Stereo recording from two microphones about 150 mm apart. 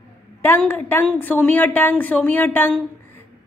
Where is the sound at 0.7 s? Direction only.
15° left (ahead or behind).